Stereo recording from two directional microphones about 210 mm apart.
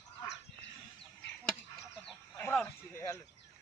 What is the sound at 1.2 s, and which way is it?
Goose, 55° left (ahead or behind).